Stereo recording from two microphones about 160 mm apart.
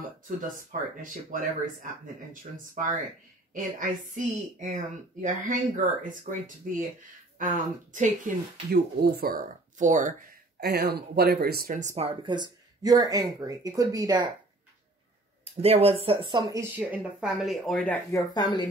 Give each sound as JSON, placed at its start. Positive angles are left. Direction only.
{"t": 0.4, "sound": "speech", "side_deg": -55}
{"t": 9.1, "sound": "speech", "side_deg": -70}
{"t": 10.6, "sound": "speech", "side_deg": -90}
{"t": 15.4, "sound": "speech", "side_deg": -40}
{"t": 18.1, "sound": "speech", "side_deg": 25}